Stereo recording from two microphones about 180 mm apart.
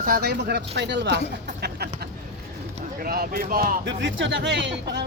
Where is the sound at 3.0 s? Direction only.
55° right (ahead or behind).